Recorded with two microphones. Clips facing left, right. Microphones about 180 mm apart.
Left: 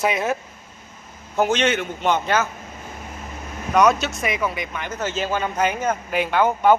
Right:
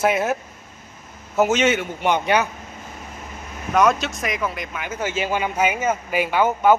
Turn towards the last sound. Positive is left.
turn(degrees=-5)  # may be behind; listen again after turning